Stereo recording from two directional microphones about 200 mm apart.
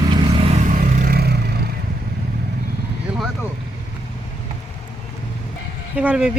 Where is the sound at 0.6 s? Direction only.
40° right (ahead or behind).